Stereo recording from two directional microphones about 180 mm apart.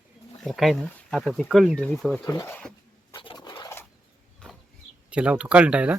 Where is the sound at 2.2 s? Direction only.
15° left (ahead or behind).